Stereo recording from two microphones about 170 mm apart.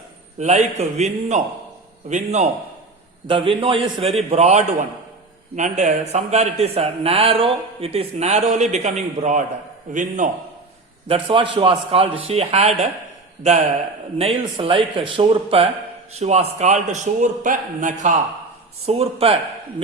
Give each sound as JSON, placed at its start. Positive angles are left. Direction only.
{"t": 0.3, "sound": "a man's voice", "side_deg": -45}
{"t": 3.2, "sound": "a man's voice", "side_deg": -30}
{"t": 11.1, "sound": "a man's voice", "side_deg": -30}
{"t": 14.2, "sound": "a man's voice", "side_deg": -35}
{"t": 18.9, "sound": "a man's voice", "side_deg": -35}